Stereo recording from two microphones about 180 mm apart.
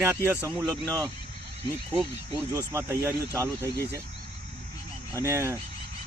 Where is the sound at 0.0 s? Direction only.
10° right (ahead or behind).